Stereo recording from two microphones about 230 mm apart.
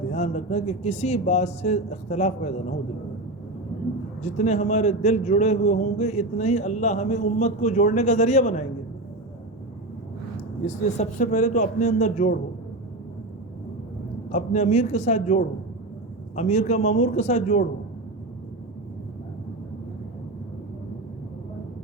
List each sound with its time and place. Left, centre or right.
0.1 s speech: left
4.2 s a man's voice: left
10.9 s a man's voice: left
14.3 s a man's voice: left